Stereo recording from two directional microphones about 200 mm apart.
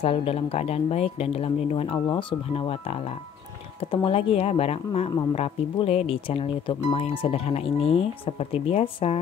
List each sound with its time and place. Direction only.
0.0 s speech: 30° left (ahead or behind)